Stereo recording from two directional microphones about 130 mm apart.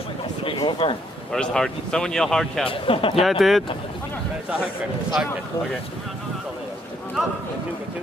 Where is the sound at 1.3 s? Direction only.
5° left (ahead or behind).